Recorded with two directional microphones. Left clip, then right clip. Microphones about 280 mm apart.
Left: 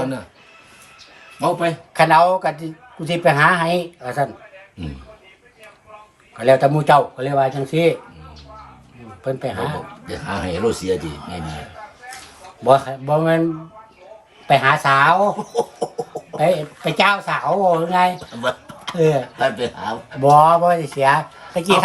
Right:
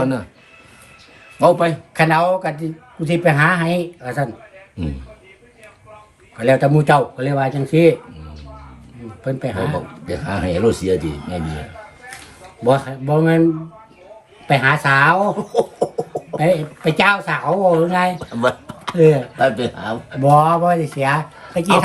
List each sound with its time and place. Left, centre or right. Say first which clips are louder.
1.4 s speech: right 6 dB; centre
1.9 s speech: left 4 dB; centre
6.3 s speech: left 1 dB; centre
9.2 s speech: right 1 dB; centre
10.2 s speech: right 3 dB; centre
12.6 s speech: left 2 dB; centre
14.4 s speech: left 1 dB; centre
16.4 s speech: even; centre
18.4 s a sound: right 4 dB; centre
18.9 s speech: right 4 dB; centre
20.2 s speech: left 2 dB; centre